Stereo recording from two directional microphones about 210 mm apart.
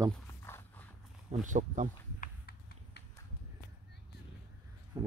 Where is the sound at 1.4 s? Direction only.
35° right (ahead or behind).